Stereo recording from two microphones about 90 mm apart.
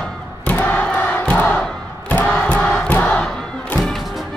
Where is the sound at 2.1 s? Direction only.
15° left (ahead or behind).